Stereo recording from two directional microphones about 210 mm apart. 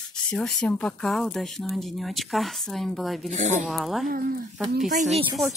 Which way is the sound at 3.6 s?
Centre (ahead or behind).